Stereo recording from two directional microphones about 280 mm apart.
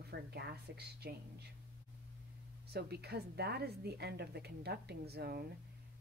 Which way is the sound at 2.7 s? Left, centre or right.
Right.